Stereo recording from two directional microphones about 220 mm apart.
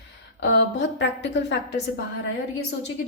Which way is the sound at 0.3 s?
55° left (ahead or behind).